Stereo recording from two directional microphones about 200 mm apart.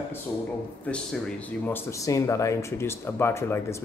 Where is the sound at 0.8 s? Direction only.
5° left (ahead or behind).